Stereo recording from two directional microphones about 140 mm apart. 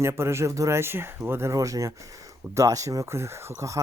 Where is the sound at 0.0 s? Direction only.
20° right (ahead or behind).